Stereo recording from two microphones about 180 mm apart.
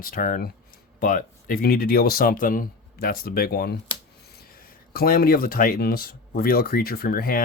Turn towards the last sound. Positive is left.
turn(degrees=55)  # may be behind; listen again after turning